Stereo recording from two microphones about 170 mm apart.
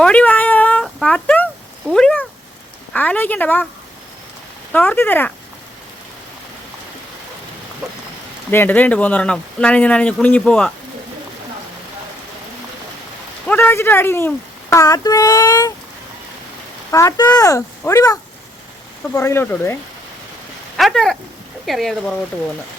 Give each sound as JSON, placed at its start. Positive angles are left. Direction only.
{"t": 0.0, "sound": "speech", "side_deg": 5}
{"t": 4.7, "sound": "speech", "side_deg": 10}
{"t": 8.4, "sound": "speech", "side_deg": 10}
{"t": 13.5, "sound": "speech", "side_deg": 10}
{"t": 16.9, "sound": "speech", "side_deg": 20}
{"t": 20.7, "sound": "speech", "side_deg": 0}